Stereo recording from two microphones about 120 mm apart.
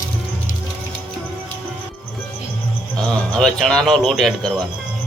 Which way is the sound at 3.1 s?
5° left (ahead or behind).